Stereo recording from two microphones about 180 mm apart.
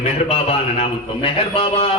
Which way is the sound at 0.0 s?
35° left (ahead or behind).